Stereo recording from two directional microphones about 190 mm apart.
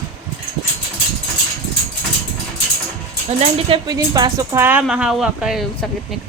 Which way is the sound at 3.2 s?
30° right (ahead or behind).